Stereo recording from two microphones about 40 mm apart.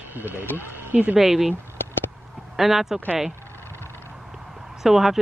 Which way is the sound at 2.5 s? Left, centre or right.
Centre.